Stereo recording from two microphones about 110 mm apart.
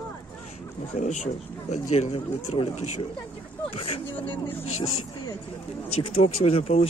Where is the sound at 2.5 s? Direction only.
65° left (ahead or behind).